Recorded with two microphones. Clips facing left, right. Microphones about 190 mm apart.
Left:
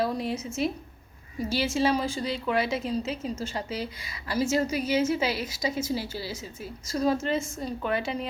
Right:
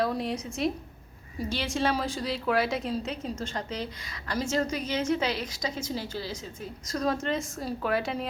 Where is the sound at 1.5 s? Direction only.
5° left (ahead or behind).